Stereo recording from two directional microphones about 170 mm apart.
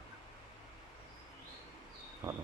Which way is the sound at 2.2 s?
15° right (ahead or behind).